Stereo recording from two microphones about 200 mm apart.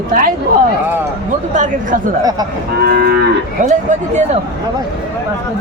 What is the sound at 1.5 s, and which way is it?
Speech, 40° right (ahead or behind).